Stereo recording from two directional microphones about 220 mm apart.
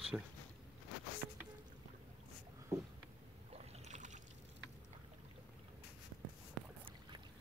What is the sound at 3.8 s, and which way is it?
Boat, 35° right (ahead or behind).